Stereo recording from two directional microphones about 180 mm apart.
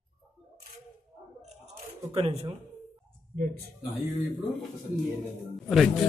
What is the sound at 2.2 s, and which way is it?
Speech, 30° right (ahead or behind).